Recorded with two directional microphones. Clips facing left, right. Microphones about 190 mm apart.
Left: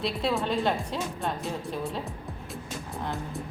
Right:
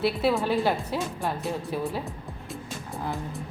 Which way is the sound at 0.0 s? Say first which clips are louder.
Right 4 dB; 5° right (ahead or behind).